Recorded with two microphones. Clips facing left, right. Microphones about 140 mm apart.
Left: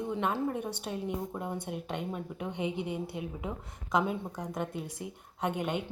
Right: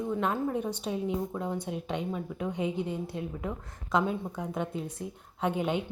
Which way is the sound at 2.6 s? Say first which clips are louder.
Right 2 dB; 70° left (ahead or behind).